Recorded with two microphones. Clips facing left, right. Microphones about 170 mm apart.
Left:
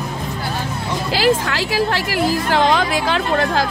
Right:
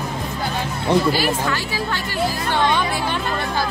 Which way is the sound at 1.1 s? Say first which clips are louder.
Left 4 dB; 90° left.